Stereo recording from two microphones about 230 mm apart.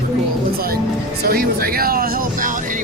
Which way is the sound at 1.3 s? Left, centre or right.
Right.